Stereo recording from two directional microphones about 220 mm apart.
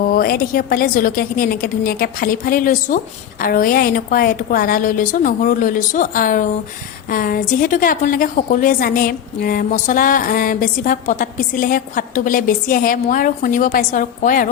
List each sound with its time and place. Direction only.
0.0 s a woman's voice: 40° left (ahead or behind)